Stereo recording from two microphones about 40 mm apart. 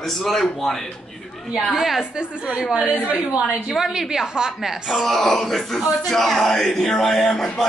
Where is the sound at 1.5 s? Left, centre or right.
Centre.